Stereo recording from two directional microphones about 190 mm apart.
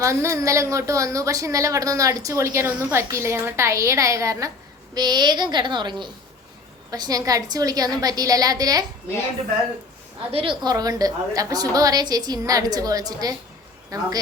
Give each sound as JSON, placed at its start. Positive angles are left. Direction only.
{"t": 0.0, "sound": "a woman's voice", "side_deg": -15}
{"t": 10.3, "sound": "a woman's voice", "side_deg": -25}